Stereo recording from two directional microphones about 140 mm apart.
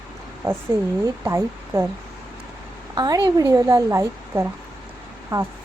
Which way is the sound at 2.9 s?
25° right (ahead or behind).